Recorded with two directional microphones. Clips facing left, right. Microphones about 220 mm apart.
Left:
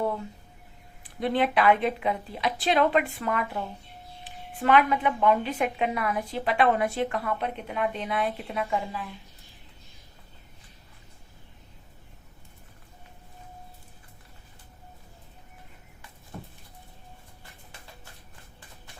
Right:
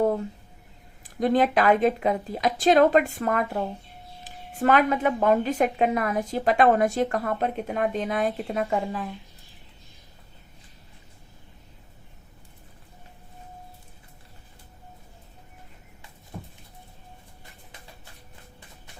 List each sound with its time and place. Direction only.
1.0 s a woman's voice: 40° right (ahead or behind)